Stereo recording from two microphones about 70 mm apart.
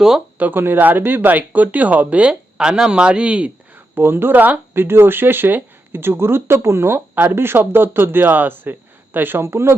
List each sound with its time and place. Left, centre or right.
0.3 s speech: right
3.9 s speech: right